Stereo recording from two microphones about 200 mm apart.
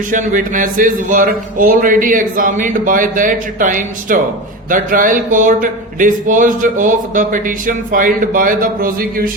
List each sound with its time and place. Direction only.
0.1 s speech: 40° right (ahead or behind)